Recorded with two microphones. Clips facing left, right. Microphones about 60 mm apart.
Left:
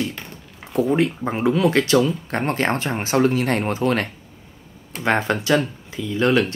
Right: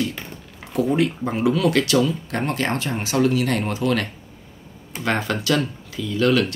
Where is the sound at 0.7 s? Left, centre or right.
Left.